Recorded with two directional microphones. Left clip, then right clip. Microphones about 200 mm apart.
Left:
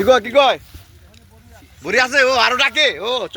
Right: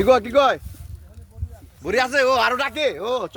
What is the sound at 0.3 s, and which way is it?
Speech, 55° right (ahead or behind).